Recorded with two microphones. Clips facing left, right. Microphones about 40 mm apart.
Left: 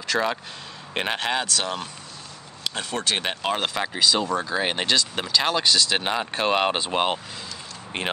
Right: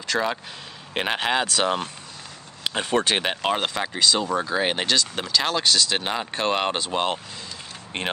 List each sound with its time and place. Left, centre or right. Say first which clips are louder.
0.0 s speech: even; centre
1.5 s speech: right 4 dB; right
3.2 s speech: right 2 dB; centre
7.9 s speech: even; centre